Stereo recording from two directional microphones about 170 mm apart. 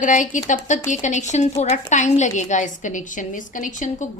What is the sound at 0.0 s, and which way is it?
A woman's voice, 50° left (ahead or behind).